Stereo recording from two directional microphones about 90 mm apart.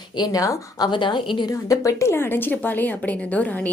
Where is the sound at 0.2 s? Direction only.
45° left (ahead or behind).